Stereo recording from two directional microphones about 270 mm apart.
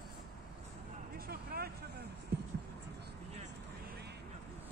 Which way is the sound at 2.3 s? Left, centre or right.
Right.